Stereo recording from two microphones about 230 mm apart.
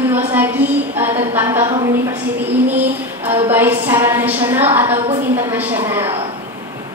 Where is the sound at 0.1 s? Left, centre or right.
Centre.